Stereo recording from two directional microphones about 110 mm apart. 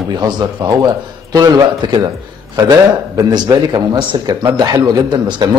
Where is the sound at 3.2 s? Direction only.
40° right (ahead or behind).